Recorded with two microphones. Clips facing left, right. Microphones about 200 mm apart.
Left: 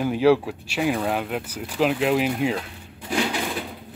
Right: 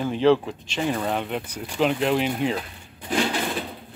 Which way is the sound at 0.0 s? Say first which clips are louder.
Left 1 dB; 10° left (ahead or behind).